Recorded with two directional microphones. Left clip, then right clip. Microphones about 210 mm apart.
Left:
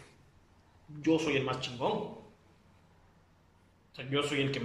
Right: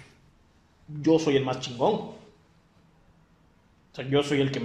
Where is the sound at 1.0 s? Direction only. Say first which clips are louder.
Right 7 dB; 25° right (ahead or behind).